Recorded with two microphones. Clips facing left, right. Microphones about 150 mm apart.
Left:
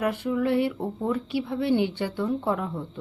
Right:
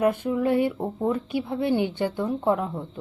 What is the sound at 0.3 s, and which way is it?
Speech, 35° right (ahead or behind).